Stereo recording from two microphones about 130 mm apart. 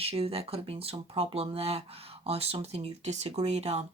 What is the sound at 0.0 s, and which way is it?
Speech, 50° right (ahead or behind).